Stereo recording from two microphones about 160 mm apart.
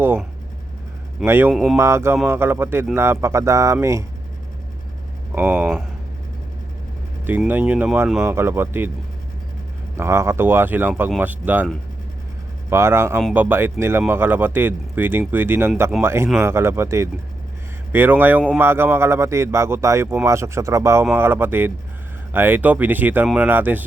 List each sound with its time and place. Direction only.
1.2 s speech: 15° right (ahead or behind)
5.3 s speech: 10° right (ahead or behind)
7.3 s speech: 10° right (ahead or behind)
10.0 s speech: 15° right (ahead or behind)
12.7 s speech: 15° right (ahead or behind)